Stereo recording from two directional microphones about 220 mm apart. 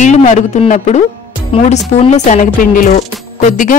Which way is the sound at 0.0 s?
35° left (ahead or behind).